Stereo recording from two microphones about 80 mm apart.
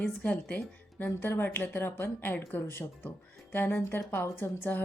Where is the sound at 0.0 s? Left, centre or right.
Centre.